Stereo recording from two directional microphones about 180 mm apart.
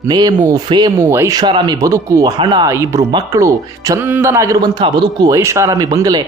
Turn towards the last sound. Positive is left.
turn(degrees=-20)  # may be behind; listen again after turning